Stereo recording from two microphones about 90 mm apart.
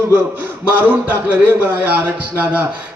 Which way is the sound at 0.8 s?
20° right (ahead or behind).